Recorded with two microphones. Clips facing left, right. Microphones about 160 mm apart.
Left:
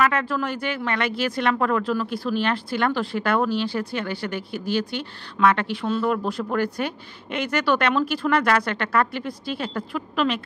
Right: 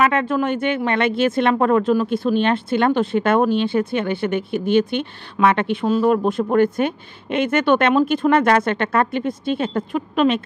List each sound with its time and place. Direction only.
0.0 s speech: 20° right (ahead or behind)